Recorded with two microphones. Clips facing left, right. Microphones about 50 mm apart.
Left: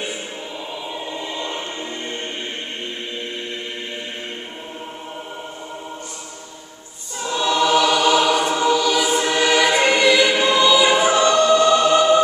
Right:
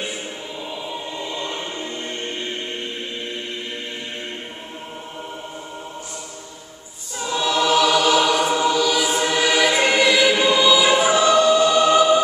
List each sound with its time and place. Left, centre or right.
1.1 s music: centre
7.2 s choir: centre